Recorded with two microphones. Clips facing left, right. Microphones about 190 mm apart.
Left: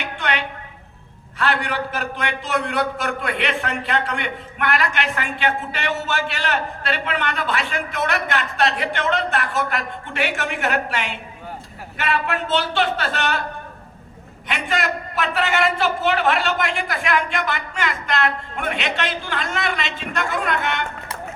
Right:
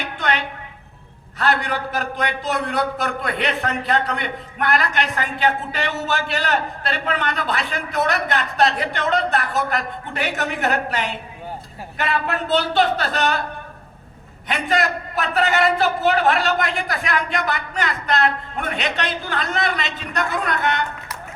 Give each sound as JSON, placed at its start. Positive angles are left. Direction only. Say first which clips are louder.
{"t": 0.0, "sound": "a sound", "louder": "right 1 dB", "side_deg": -40}
{"t": 1.4, "sound": "a man's voice", "louder": "right 1 dB", "side_deg": -40}
{"t": 14.4, "sound": "a man's voice", "louder": "right 3 dB", "side_deg": -40}